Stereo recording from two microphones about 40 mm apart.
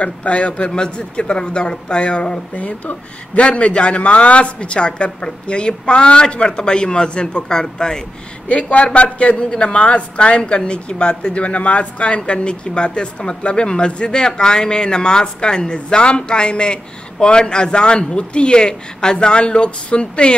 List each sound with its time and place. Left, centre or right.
0.0 s speech: left
2.5 s speech: left; by 8.0 s centre
8.5 s speech: left